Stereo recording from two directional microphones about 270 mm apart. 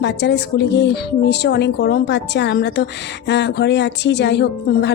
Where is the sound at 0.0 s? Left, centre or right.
Left.